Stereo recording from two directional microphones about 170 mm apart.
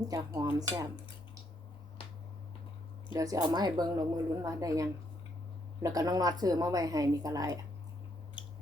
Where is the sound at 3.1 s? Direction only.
20° right (ahead or behind).